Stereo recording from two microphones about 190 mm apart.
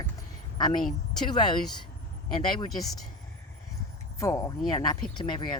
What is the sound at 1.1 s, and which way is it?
Speech, 25° left (ahead or behind).